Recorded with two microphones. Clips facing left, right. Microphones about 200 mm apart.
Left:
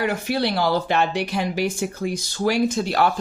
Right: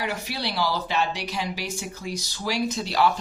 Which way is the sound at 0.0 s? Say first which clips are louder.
Left 8 dB; 55° left (ahead or behind).